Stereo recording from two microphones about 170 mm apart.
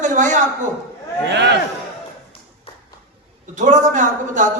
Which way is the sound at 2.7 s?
35° left (ahead or behind).